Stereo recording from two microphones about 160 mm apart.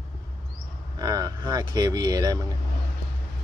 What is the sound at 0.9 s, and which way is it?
Speech, 25° right (ahead or behind).